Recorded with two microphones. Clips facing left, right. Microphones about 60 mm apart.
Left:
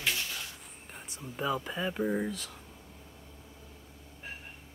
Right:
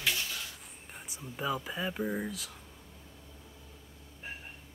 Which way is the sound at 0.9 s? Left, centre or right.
Centre.